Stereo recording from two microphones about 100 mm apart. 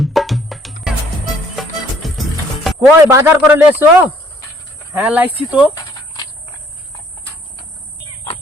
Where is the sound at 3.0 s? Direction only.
30° right (ahead or behind).